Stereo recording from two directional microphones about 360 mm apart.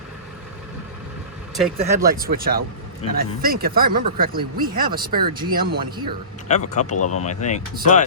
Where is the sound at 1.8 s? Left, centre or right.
Centre.